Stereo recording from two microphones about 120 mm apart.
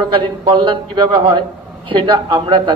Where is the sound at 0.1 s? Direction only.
45° right (ahead or behind).